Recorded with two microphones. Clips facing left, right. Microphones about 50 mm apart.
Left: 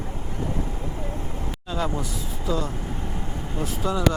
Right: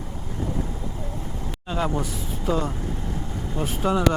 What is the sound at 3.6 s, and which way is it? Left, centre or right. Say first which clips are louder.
Speech: right 3 dB; right.